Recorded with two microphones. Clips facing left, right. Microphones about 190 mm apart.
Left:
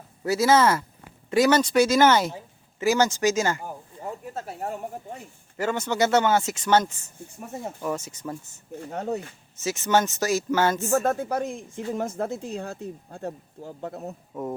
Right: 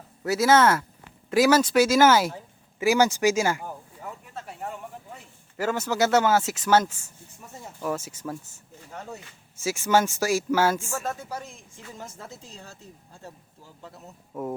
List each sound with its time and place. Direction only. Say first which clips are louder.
0.3 s speech: even; centre (ahead or behind)
4.0 s speech: left 6 dB; 40° left (ahead or behind)
5.5 s speech: even; 5° right (ahead or behind)
7.3 s speech: left 9 dB; 55° left (ahead or behind)
7.8 s speech: right 3 dB; 5° right (ahead or behind)
8.8 s speech: left 8 dB; 60° left (ahead or behind)
9.6 s speech: even; 10° right (ahead or behind)
10.8 s speech: left 9 dB; 45° left (ahead or behind)